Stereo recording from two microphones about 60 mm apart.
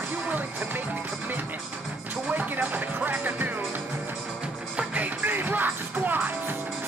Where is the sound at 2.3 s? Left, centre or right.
Right.